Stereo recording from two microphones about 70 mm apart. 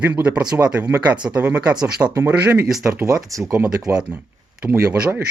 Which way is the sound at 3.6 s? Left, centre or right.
Centre.